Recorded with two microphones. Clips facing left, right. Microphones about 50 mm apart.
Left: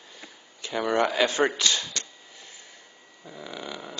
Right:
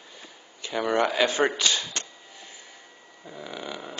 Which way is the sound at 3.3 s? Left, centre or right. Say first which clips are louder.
Right 1 dB; centre.